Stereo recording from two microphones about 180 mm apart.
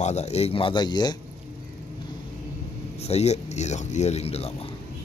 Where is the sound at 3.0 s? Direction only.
35° left (ahead or behind).